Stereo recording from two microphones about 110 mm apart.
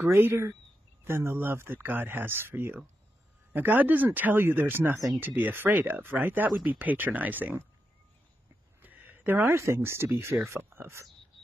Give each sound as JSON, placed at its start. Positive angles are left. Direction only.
{"t": 0.0, "sound": "speech", "side_deg": -20}
{"t": 8.8, "sound": "speech", "side_deg": -15}